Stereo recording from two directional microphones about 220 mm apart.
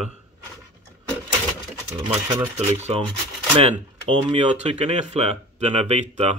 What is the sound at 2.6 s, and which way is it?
Rub, 30° right (ahead or behind).